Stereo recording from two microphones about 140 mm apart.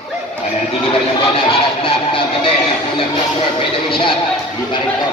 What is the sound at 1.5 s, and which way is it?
A man's voice, 40° left (ahead or behind).